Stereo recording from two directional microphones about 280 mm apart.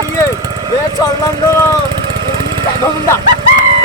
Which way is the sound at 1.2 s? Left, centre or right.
Centre.